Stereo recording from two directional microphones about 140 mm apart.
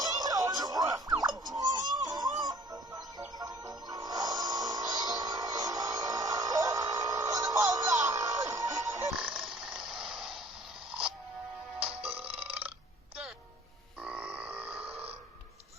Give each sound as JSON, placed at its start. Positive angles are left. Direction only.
{"t": 0.0, "sound": "music", "side_deg": -25}
{"t": 9.1, "sound": "a sound", "side_deg": -5}
{"t": 12.4, "sound": "burping", "side_deg": -10}
{"t": 14.0, "sound": "grunt", "side_deg": -10}
{"t": 14.8, "sound": "burping", "side_deg": -45}